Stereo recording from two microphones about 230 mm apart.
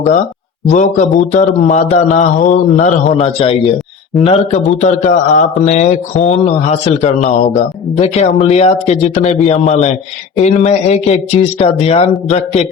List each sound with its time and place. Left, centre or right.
0.7 s speech: left